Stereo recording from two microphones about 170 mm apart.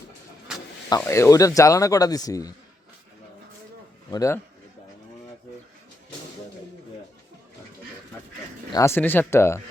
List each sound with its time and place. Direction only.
0.9 s speech: 20° left (ahead or behind)
4.1 s speech: 20° left (ahead or behind)
8.7 s speech: 15° left (ahead or behind)